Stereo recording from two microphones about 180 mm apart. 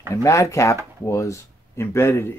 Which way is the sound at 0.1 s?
15° left (ahead or behind).